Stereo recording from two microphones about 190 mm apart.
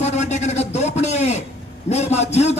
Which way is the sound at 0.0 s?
35° left (ahead or behind).